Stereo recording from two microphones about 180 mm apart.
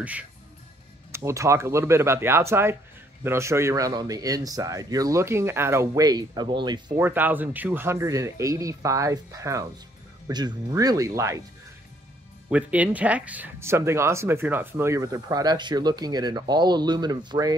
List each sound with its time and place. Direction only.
0.0 s speech: 10° right (ahead or behind); by 6.8 s 25° right (ahead or behind)
7.0 s speech: 10° right (ahead or behind)
12.4 s speech: 5° right (ahead or behind); by 17.6 s 25° right (ahead or behind)